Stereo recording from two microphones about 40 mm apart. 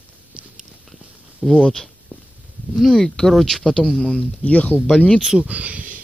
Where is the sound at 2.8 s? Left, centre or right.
Centre.